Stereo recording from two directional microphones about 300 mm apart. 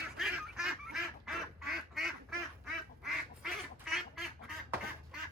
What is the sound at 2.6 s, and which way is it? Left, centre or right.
Quack, centre.